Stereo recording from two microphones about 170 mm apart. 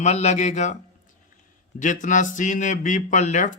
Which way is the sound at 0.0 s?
40° left (ahead or behind).